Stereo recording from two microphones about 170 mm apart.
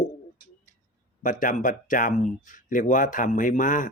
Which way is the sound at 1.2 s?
50° left (ahead or behind).